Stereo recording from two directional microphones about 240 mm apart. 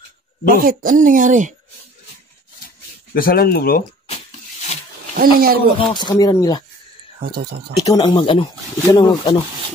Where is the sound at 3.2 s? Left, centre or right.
Left.